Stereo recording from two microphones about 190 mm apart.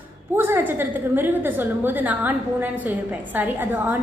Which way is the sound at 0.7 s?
10° right (ahead or behind).